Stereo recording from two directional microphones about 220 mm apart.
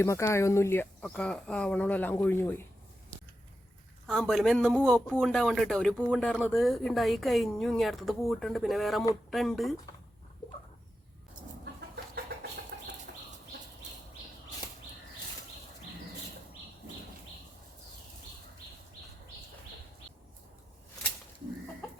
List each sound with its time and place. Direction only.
0.0 s speech: 10° left (ahead or behind)
4.0 s speech: centre (ahead or behind)
12.3 s a sound: 45° right (ahead or behind)
12.7 s bird: 45° right (ahead or behind)